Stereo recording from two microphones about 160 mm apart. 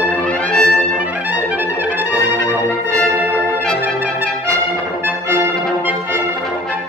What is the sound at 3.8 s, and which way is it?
Brass instrument, 10° right (ahead or behind).